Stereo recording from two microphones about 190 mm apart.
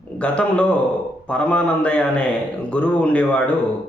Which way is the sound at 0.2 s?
5° left (ahead or behind).